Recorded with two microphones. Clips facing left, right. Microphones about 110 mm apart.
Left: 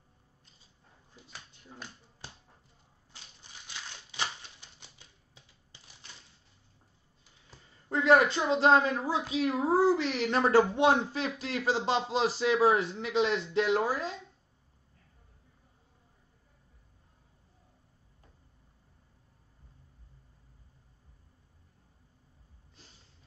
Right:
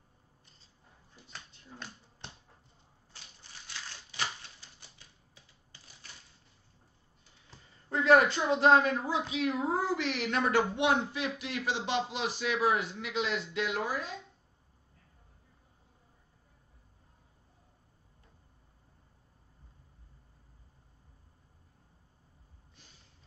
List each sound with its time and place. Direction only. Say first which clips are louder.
1.1 s dog: even; 10° left (ahead or behind)
3.4 s crushing: left 1 dB; 15° left (ahead or behind)
4.2 s typewriter: left 1 dB; 20° left (ahead or behind)
7.9 s a woman's voice: left 1 dB; 25° left (ahead or behind)
9.0 s speech: left 2 dB; 35° left (ahead or behind)